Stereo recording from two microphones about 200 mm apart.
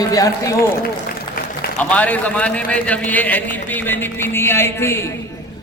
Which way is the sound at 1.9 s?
5° left (ahead or behind).